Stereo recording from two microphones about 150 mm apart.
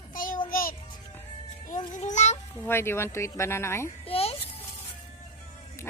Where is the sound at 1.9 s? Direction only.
55° left (ahead or behind).